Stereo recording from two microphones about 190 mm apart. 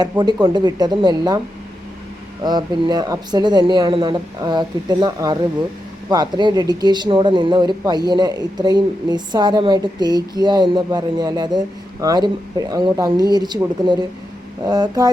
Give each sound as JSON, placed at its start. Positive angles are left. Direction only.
{"t": 0.0, "sound": "speech", "side_deg": -20}
{"t": 2.4, "sound": "speech", "side_deg": -20}